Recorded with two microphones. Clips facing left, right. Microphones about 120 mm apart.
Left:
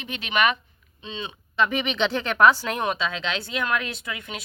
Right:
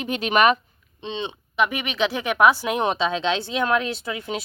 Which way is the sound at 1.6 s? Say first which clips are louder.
Right 1 dB; 10° right (ahead or behind).